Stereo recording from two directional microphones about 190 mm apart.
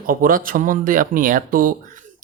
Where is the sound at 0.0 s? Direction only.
45° right (ahead or behind).